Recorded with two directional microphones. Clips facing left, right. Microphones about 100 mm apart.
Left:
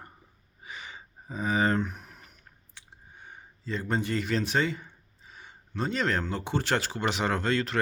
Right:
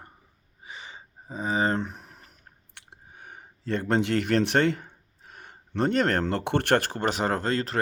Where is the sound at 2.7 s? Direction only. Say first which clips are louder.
Right 2 dB; 65° right (ahead or behind); by 7.8 s 35° right (ahead or behind).